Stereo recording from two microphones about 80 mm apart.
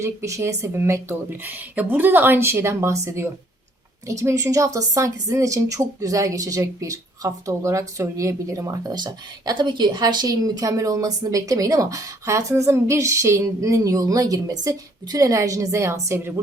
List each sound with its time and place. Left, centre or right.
0.0 s speech: right
1.3 s a woman's voice: right
9.0 s a woman's voice: right